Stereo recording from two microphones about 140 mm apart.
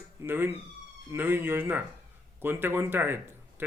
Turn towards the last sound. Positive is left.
turn(degrees=-15)  # may be behind; listen again after turning